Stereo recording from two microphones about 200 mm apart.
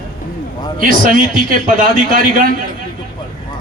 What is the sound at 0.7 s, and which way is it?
A man's voice, 45° right (ahead or behind).